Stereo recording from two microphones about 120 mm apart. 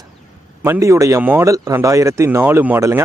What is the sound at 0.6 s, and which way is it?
Speech, 20° right (ahead or behind).